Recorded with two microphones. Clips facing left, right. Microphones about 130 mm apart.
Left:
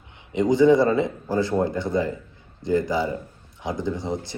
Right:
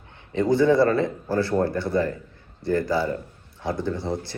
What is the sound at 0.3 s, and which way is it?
Speech, 15° left (ahead or behind).